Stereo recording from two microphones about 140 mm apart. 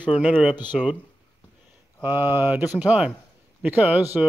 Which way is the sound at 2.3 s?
15° right (ahead or behind).